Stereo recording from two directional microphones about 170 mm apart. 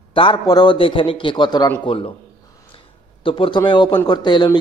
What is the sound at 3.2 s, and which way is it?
A man's voice, 30° left (ahead or behind).